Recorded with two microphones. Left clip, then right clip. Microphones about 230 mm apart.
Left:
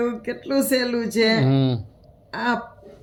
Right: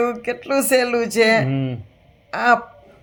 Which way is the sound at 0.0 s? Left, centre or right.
Right.